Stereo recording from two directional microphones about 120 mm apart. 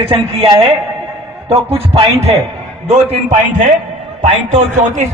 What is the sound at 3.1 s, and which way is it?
A man's voice, 70° right (ahead or behind).